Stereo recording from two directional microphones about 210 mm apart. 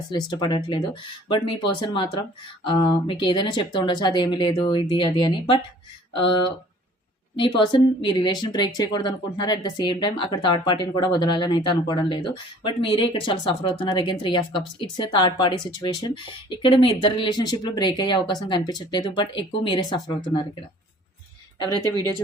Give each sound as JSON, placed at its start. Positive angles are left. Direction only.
{"t": 0.1, "sound": "speech", "side_deg": 20}